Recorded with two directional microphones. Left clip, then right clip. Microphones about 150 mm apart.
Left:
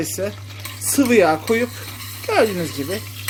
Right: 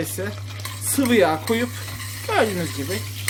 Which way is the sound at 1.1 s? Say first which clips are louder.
Left 3 dB; 30° left (ahead or behind).